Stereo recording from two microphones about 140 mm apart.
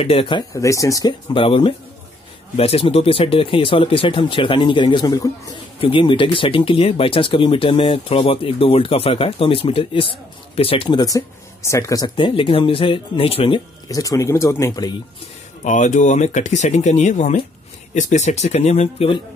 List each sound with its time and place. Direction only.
0.0 s speech: 40° left (ahead or behind)
0.5 s speech: 25° left (ahead or behind)
1.3 s speech: 40° left (ahead or behind)
5.8 s speech: 40° left (ahead or behind)
13.8 s speech: 25° left (ahead or behind)
15.6 s speech: 65° left (ahead or behind); by 19.2 s 40° left (ahead or behind)